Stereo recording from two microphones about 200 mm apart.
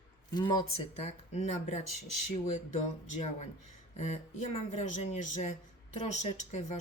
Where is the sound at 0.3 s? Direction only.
20° left (ahead or behind).